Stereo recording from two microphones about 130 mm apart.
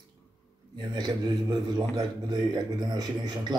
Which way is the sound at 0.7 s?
35° right (ahead or behind).